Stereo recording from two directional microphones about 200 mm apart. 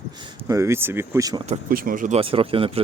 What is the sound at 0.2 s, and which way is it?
Speech, 15° right (ahead or behind).